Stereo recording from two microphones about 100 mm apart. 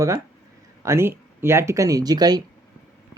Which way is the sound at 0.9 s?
25° right (ahead or behind).